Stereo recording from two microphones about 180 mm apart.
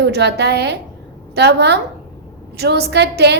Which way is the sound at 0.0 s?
70° right (ahead or behind).